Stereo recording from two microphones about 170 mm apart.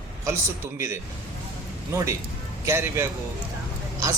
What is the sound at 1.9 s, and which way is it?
A man's voice, 15° right (ahead or behind).